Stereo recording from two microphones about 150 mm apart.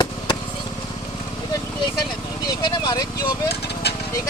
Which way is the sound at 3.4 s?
90° left.